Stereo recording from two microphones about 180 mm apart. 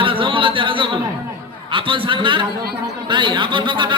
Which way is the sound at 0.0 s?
30° right (ahead or behind).